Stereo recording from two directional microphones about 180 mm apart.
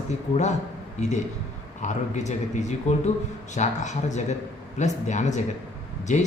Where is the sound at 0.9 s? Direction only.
40° left (ahead or behind).